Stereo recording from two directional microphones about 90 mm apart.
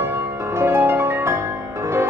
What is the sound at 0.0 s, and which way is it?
Music, 25° right (ahead or behind).